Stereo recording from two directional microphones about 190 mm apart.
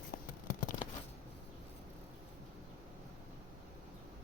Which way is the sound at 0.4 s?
45° left (ahead or behind).